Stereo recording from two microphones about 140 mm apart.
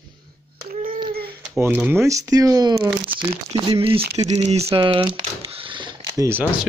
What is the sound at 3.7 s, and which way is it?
Speech, 40° right (ahead or behind).